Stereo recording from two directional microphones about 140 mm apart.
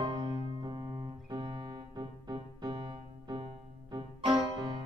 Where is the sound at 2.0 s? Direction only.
30° right (ahead or behind).